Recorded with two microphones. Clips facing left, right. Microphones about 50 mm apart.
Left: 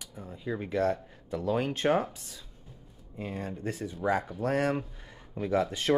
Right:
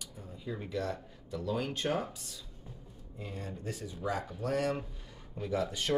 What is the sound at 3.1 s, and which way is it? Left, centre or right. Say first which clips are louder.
Speech: left 6 dB; left.